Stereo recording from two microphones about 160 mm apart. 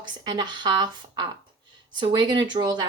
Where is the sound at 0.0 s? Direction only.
25° right (ahead or behind).